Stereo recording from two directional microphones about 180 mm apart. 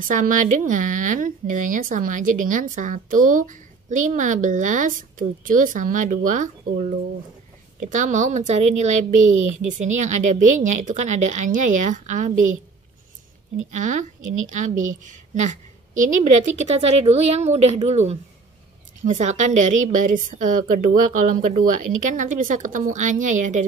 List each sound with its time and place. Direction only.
0.0 s a woman's voice: 50° right (ahead or behind)
13.7 s speech: 40° right (ahead or behind)
15.0 s a woman's voice: 45° right (ahead or behind)